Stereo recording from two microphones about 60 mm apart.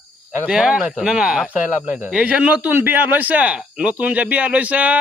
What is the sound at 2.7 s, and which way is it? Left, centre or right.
Speech, right.